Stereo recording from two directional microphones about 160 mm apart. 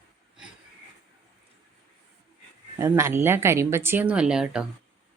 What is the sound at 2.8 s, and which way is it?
A woman's voice, 15° right (ahead or behind).